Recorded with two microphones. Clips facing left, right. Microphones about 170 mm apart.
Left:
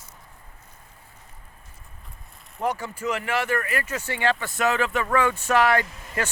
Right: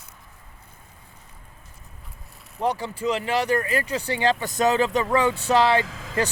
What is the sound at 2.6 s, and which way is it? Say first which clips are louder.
Speech: right 2 dB; 30° right (ahead or behind).